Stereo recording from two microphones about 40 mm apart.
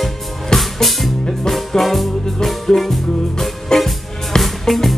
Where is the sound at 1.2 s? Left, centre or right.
Centre.